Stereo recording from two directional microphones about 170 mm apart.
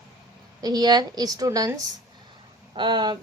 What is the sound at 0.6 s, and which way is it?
A woman's voice, 25° right (ahead or behind).